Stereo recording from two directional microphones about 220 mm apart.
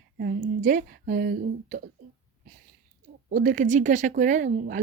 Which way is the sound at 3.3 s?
35° right (ahead or behind).